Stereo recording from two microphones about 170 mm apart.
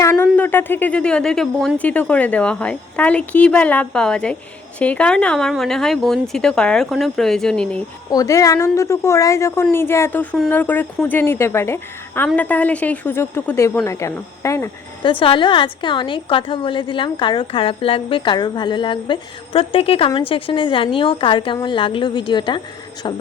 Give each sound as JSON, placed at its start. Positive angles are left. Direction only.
{"t": 0.0, "sound": "speech", "side_deg": 15}
{"t": 8.1, "sound": "speech", "side_deg": 20}
{"t": 15.0, "sound": "a woman's voice", "side_deg": 30}